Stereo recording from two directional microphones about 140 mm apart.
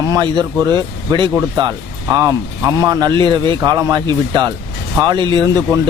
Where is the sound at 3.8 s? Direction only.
20° right (ahead or behind).